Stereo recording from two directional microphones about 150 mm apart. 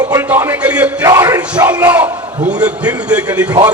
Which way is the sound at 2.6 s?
10° right (ahead or behind).